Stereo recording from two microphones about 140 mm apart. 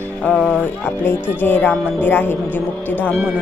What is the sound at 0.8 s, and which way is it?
Speech, 15° left (ahead or behind).